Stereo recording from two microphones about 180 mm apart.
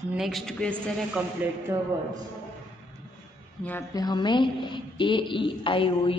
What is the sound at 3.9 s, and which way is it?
A woman's voice, 20° left (ahead or behind).